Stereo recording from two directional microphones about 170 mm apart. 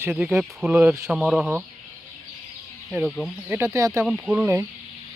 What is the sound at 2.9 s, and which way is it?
Speech, centre (ahead or behind).